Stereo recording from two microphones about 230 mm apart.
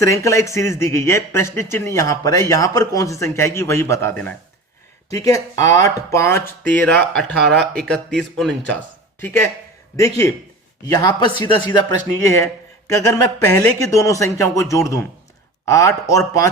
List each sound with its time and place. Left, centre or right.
0.0 s speech: centre